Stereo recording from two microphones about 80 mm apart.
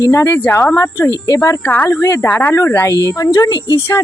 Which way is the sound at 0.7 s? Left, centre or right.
Left.